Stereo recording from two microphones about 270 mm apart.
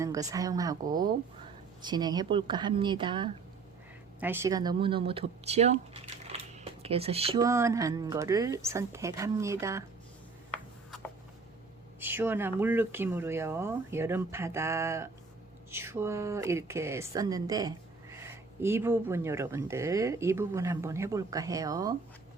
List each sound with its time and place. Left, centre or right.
0.0 s speech: centre
10.5 s writing: centre
11.9 s speech: centre